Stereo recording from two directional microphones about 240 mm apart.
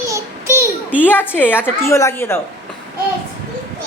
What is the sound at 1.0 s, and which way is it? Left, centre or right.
A woman's voice, centre.